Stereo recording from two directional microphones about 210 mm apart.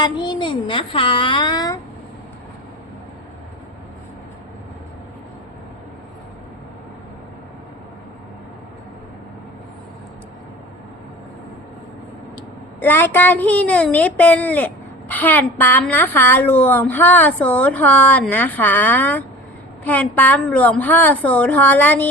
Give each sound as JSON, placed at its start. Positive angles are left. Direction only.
{"t": 0.0, "sound": "speech", "side_deg": 20}
{"t": 12.8, "sound": "a woman's voice", "side_deg": 10}